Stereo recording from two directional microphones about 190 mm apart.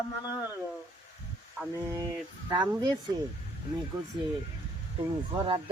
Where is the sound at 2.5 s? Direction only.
25° right (ahead or behind).